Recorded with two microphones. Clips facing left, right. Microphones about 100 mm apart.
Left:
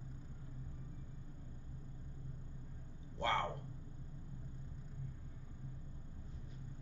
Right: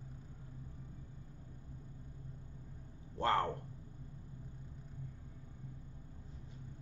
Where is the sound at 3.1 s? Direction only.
45° right (ahead or behind).